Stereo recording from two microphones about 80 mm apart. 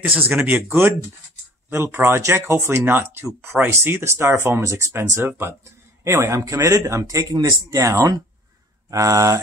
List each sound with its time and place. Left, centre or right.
0.0 s speech: right